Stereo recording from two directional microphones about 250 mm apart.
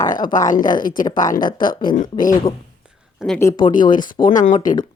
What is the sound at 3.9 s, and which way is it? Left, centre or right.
Speech, left.